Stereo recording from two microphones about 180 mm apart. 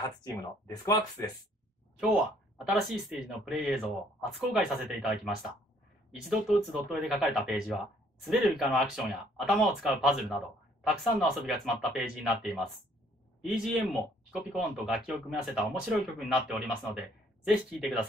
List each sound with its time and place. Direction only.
0.2 s speech: 20° left (ahead or behind)
2.0 s speech: centre (ahead or behind)